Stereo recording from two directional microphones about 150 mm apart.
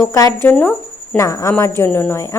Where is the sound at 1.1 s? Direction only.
20° left (ahead or behind).